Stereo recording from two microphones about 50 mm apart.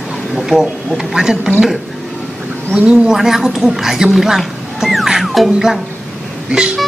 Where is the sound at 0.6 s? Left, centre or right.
Centre.